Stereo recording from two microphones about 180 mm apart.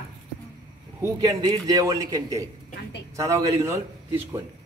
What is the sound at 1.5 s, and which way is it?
A man's voice, 20° right (ahead or behind).